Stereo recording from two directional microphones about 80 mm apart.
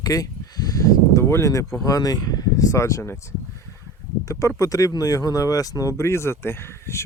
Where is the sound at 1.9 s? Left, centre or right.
Left.